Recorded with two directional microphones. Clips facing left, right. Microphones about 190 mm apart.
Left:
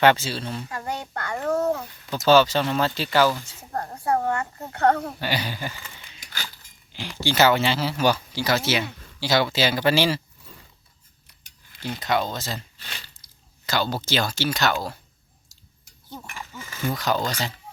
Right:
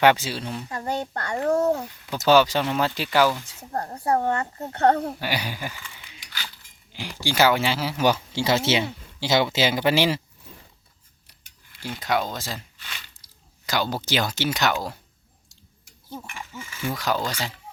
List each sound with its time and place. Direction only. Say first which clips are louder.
0.0 s speech: even; 15° right (ahead or behind)
0.7 s speech: right 3 dB; 30° right (ahead or behind)
2.0 s speech: left 1 dB; 15° right (ahead or behind)
3.7 s speech: right 1 dB; 30° right (ahead or behind)
5.0 s speech: even; 10° right (ahead or behind)
5.8 s keys jangling: left 1 dB; 45° left (ahead or behind)
6.9 s speech: left 1 dB; 15° right (ahead or behind)
11.8 s speech: left 1 dB; 10° right (ahead or behind)
13.7 s speech: even; 15° right (ahead or behind)
16.2 s speech: right 1 dB; 40° left (ahead or behind)
16.9 s speech: left 1 dB; 10° right (ahead or behind)